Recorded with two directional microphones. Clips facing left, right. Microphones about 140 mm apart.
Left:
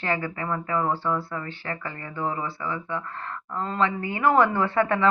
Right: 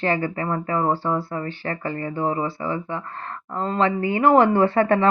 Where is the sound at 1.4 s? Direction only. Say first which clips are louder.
Right 6 dB; 50° right (ahead or behind).